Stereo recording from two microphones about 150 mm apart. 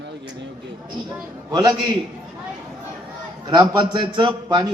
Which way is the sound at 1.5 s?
30° right (ahead or behind).